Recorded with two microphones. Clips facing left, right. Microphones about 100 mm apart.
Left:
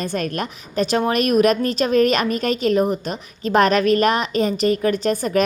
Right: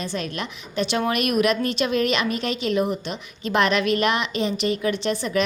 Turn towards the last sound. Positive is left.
turn(degrees=45)  # may be behind; listen again after turning